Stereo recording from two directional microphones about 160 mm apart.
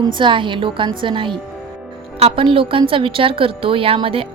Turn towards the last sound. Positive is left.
turn(degrees=-35)  # may be behind; listen again after turning